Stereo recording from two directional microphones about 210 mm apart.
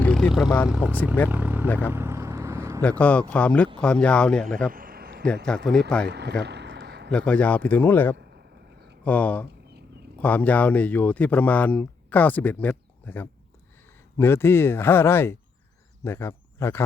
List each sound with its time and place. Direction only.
0.0 s vehicle: 5° left (ahead or behind)
0.7 s speech: 5° right (ahead or behind)
1.3 s vehicle: 10° right (ahead or behind)
1.6 s speech: 10° left (ahead or behind)
1.9 s vehicle: 10° right (ahead or behind)
3.0 s speech: 5° left (ahead or behind)
4.7 s a sound: 45° right (ahead or behind)
5.5 s speech: 5° left (ahead or behind)
6.1 s speech: 50° right (ahead or behind)
6.4 s a sound: 55° right (ahead or behind)
7.1 s speech: 5° left (ahead or behind)